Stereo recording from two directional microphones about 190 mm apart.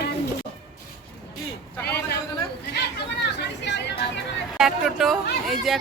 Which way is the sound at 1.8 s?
60° left (ahead or behind).